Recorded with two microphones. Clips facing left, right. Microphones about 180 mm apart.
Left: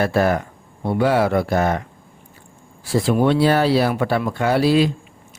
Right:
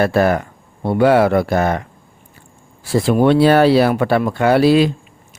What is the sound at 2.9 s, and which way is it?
Speech, 65° right (ahead or behind).